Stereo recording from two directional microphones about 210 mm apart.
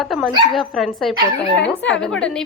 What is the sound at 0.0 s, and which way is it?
A woman's voice, centre (ahead or behind).